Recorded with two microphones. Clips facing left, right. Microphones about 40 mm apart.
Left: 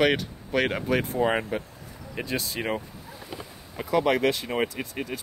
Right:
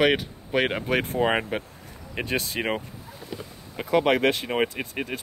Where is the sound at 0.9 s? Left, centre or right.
Right.